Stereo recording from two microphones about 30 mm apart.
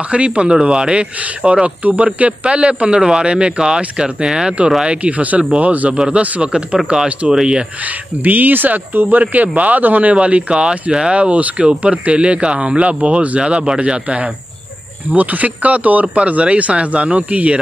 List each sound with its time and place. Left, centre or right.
0.1 s speech: right
4.8 s speech: right
5.9 s speech: right
7.8 s speech: right
9.2 s speech: right
9.8 s speech: right
10.1 s speech: right
11.1 s speech: right
13.4 s speech: right
15.1 s speech: right
16.2 s speech: right